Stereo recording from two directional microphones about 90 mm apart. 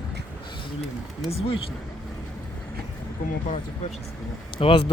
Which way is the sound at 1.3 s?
90° left.